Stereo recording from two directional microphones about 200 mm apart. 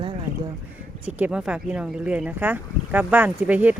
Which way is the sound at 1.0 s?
5° right (ahead or behind).